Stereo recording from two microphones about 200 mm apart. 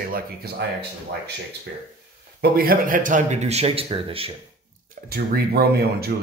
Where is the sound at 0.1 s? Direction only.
55° right (ahead or behind).